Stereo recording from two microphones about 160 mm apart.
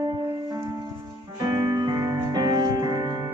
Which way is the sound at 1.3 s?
25° right (ahead or behind).